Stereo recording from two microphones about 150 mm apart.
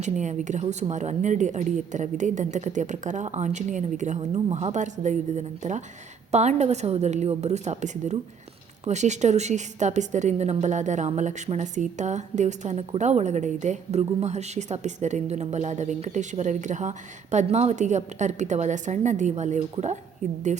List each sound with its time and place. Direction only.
0.0 s a woman's voice: 55° right (ahead or behind)